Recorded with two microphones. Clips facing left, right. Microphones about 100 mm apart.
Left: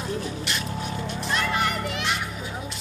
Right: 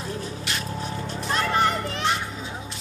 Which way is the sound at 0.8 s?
35° right (ahead or behind).